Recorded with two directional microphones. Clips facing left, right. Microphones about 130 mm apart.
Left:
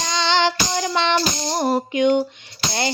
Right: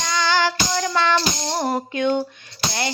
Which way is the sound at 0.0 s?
25° left (ahead or behind).